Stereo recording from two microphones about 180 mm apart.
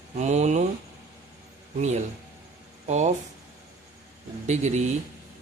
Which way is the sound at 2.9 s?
40° right (ahead or behind).